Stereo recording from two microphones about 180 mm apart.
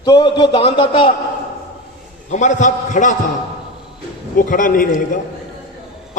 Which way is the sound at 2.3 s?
40° left (ahead or behind).